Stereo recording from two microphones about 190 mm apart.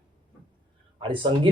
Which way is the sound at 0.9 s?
25° right (ahead or behind).